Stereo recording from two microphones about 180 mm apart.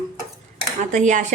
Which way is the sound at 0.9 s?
45° right (ahead or behind).